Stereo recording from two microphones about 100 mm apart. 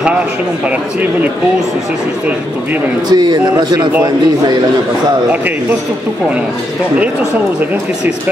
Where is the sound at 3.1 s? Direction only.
45° right (ahead or behind).